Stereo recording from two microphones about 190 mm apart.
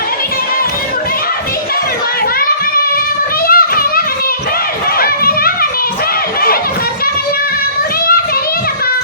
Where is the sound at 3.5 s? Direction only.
50° left (ahead or behind).